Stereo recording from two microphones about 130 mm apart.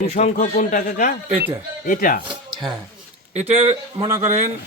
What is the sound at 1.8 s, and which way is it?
Speech, 90° left.